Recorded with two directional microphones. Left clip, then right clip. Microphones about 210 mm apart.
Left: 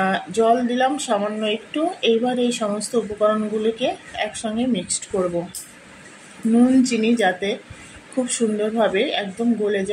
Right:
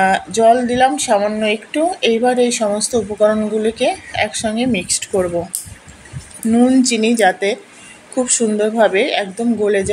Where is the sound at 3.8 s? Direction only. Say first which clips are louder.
Right 7 dB; 15° right (ahead or behind).